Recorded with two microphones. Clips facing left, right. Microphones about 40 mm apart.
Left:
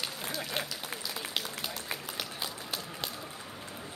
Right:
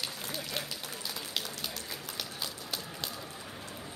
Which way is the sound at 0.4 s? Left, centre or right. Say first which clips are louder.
Left 3 dB; centre.